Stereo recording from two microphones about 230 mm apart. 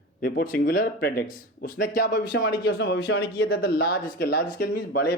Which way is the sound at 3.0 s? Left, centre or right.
Left.